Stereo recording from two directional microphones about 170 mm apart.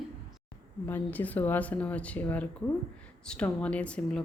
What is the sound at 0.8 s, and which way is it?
A woman's voice, 10° left (ahead or behind).